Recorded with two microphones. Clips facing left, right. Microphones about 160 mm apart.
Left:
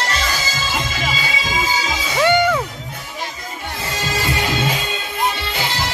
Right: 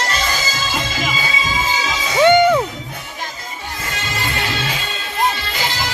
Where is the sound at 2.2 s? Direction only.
20° right (ahead or behind).